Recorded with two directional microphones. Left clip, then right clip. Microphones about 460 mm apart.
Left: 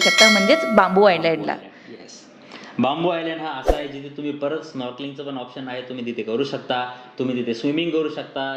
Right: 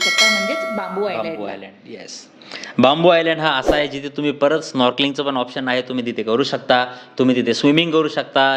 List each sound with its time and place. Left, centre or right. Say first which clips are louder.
0.0 s bell: left 1 dB; centre
0.8 s speech: left 8 dB; left
2.7 s a man's voice: right 9 dB; right